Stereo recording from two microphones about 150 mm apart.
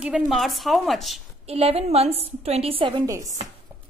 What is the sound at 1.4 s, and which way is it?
A woman's voice, 40° right (ahead or behind).